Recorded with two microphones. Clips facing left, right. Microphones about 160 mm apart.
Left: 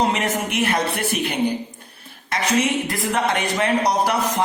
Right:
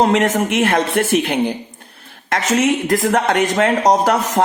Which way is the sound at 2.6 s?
45° right (ahead or behind).